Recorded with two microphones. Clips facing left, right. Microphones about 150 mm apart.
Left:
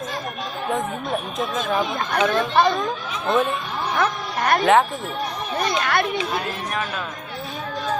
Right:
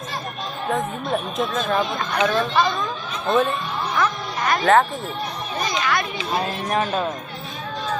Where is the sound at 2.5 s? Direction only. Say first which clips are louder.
Left 2 dB; 55° left (ahead or behind).